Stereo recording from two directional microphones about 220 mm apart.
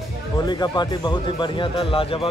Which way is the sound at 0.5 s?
20° left (ahead or behind).